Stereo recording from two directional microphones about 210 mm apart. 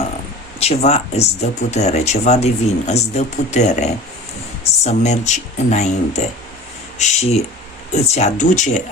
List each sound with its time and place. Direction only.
0.6 s speech: 30° left (ahead or behind)